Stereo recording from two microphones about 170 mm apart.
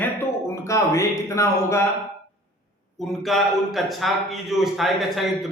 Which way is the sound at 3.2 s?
Centre (ahead or behind).